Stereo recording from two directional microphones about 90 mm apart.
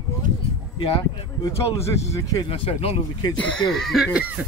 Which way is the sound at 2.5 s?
90° left.